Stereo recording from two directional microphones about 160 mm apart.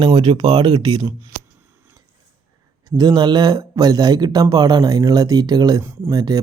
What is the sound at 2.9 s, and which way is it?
Speech, 25° right (ahead or behind).